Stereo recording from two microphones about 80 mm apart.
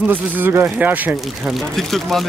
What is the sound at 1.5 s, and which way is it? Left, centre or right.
Speech, centre.